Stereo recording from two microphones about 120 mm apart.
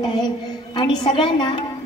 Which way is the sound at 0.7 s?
40° left (ahead or behind).